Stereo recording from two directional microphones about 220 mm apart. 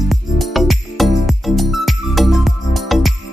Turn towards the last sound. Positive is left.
turn(degrees=0)  # may be behind; listen again after turning